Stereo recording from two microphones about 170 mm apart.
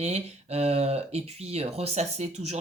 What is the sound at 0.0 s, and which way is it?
Speech, 40° right (ahead or behind).